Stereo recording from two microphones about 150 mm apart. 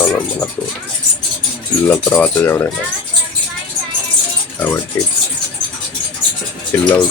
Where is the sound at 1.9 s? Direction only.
10° left (ahead or behind).